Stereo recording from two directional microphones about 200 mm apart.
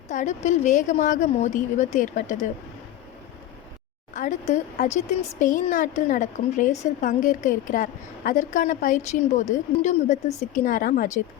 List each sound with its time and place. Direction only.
0.1 s speech: 35° left (ahead or behind)
4.1 s speech: 35° left (ahead or behind)